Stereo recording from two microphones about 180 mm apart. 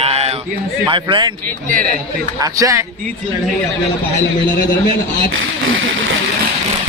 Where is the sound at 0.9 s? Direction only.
25° right (ahead or behind).